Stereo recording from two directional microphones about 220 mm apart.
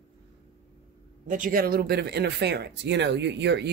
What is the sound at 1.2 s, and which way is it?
Speech, 35° right (ahead or behind).